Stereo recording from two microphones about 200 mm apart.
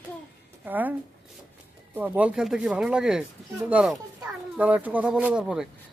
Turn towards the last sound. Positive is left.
turn(degrees=-5)  # may be behind; listen again after turning